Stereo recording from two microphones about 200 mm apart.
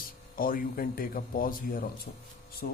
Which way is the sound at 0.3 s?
45° left (ahead or behind).